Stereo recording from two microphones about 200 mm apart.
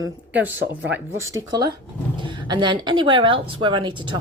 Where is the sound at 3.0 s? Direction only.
25° right (ahead or behind).